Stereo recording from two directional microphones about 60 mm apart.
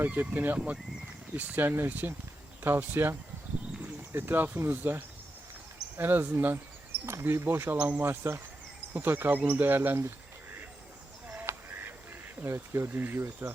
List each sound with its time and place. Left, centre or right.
0.0 s speech: right
7.0 s speech: right
7.8 s speech: right
8.0 s speech: right
11.4 s honk: right
12.5 s speech: right